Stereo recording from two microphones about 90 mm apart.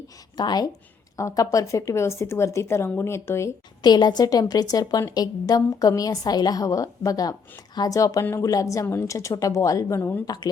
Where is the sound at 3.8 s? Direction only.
50° left (ahead or behind); by 10.2 s 25° left (ahead or behind).